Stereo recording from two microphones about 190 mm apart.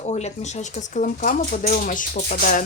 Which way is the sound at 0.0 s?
35° left (ahead or behind).